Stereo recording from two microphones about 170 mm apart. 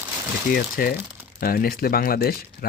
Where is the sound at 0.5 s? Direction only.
60° left (ahead or behind).